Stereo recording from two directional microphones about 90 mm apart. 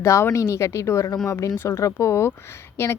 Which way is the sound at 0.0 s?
30° left (ahead or behind).